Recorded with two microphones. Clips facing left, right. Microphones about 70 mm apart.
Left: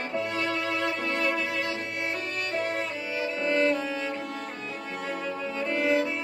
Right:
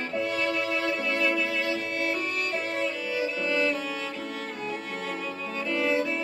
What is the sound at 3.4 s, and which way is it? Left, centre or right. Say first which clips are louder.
Music: left 4 dB; left.